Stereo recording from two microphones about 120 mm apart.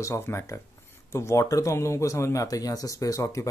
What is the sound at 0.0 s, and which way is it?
Speech, 20° left (ahead or behind).